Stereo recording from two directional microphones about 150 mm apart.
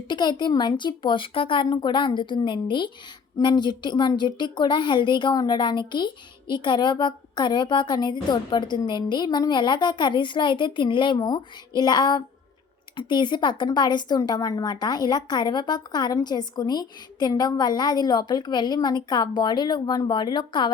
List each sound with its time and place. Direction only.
0.1 s a woman's voice: 30° left (ahead or behind)